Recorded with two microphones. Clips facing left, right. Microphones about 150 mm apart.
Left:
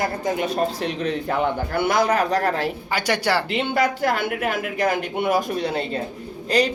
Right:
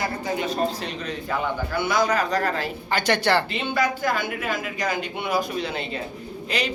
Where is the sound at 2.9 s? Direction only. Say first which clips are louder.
Right 2 dB; 10° left (ahead or behind).